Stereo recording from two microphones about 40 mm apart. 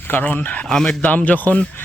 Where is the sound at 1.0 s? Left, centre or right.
Left.